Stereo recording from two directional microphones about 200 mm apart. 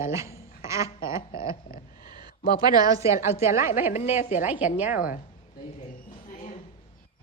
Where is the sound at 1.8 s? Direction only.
45° left (ahead or behind).